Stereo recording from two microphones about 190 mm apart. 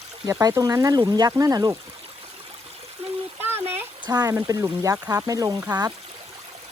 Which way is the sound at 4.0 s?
20° right (ahead or behind).